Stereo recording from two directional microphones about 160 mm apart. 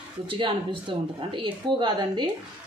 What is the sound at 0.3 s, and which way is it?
A woman's voice, 35° right (ahead or behind).